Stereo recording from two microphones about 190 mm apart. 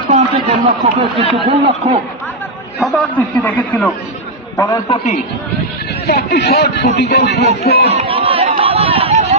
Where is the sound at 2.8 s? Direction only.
5° left (ahead or behind).